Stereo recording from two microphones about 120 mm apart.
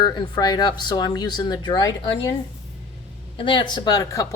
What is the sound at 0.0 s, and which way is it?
Speech, 35° left (ahead or behind).